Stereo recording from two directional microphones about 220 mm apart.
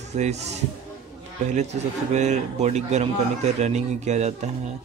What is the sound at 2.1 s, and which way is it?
A man's voice, 30° right (ahead or behind).